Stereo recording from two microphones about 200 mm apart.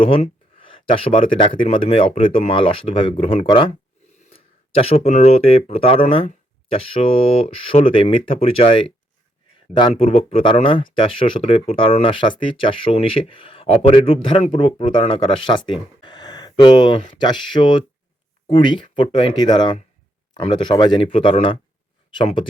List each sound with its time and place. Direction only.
0.0 s speech: 25° left (ahead or behind)